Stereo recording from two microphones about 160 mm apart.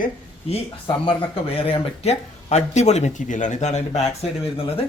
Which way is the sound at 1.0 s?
35° left (ahead or behind).